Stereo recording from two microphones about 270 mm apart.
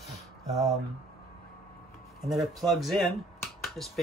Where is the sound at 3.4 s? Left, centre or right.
Centre.